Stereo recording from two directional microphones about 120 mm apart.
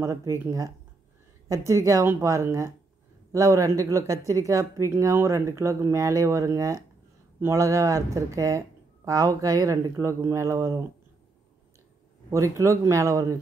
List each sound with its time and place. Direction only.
0.0 s speech: 25° right (ahead or behind)
12.3 s speech: 25° right (ahead or behind)